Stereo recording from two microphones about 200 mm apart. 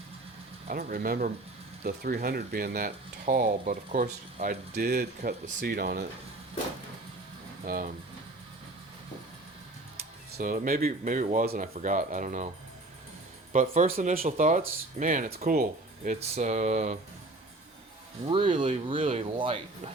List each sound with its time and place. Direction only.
0.7 s speech: 50° right (ahead or behind)
4.8 s speech: 50° right (ahead or behind)
7.6 s speech: 45° right (ahead or behind)
10.0 s speech: 45° right (ahead or behind)
13.5 s speech: 35° right (ahead or behind)
18.3 s speech: 25° right (ahead or behind)
18.5 s speech: 35° right (ahead or behind)